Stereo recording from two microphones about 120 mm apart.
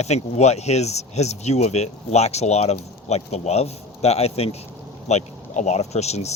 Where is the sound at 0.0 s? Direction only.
65° left (ahead or behind).